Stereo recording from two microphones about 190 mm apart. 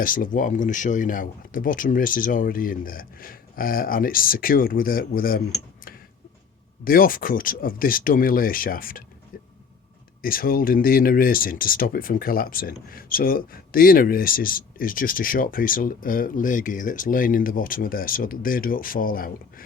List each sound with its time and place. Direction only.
0.0 s speech: 45° left (ahead or behind)
6.8 s speech: 50° left (ahead or behind)
10.2 s speech: 50° left (ahead or behind)